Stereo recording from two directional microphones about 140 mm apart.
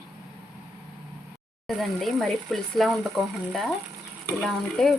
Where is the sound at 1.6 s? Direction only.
Centre (ahead or behind).